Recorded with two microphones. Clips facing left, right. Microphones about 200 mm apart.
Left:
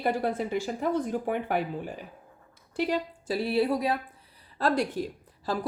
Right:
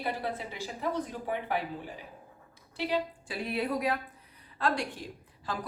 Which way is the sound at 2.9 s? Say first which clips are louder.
Left 3 dB; 35° left (ahead or behind).